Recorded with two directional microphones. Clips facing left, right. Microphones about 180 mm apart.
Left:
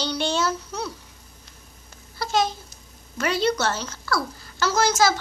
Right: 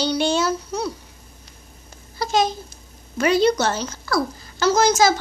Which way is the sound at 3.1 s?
15° right (ahead or behind).